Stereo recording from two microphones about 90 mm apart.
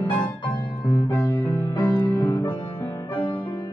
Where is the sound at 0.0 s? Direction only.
55° left (ahead or behind).